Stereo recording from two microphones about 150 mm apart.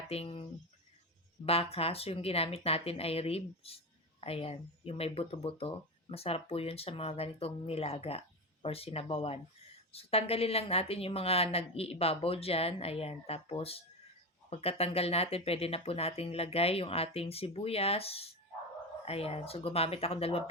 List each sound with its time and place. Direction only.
0.1 s speech: 40° left (ahead or behind)
1.5 s speech: 40° left (ahead or behind)